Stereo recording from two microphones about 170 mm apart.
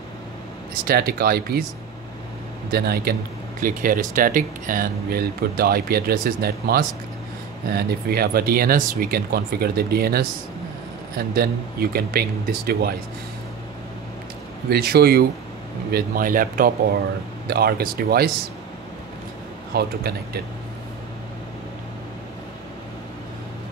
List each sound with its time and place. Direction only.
0.8 s speech: 60° right (ahead or behind)
2.7 s speech: 65° right (ahead or behind)
3.6 s speech: 55° right (ahead or behind)
14.7 s speech: 70° right (ahead or behind)
15.9 s speech: 55° right (ahead or behind)
17.5 s speech: 65° right (ahead or behind)
19.7 s a man's voice: 70° right (ahead or behind)